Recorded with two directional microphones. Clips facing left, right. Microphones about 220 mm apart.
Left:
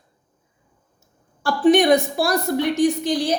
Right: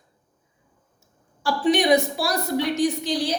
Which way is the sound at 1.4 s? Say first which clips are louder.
Left 5 dB; 50° left (ahead or behind).